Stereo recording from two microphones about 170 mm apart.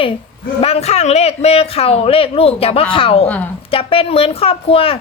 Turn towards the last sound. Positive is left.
turn(degrees=35)  # may be behind; listen again after turning